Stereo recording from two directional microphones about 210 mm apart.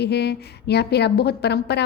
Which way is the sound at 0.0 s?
50° left (ahead or behind).